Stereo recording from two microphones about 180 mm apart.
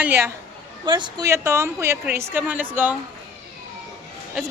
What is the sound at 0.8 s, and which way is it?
A woman's voice, 25° right (ahead or behind).